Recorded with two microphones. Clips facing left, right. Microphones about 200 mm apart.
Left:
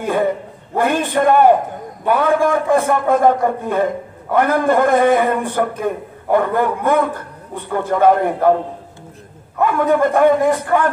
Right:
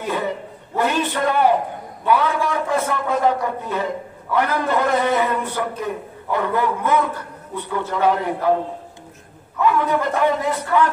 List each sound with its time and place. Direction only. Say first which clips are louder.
0.0 s a man's voice: left 6 dB; 50° left (ahead or behind)
9.6 s a man's voice: left 4 dB; 50° left (ahead or behind)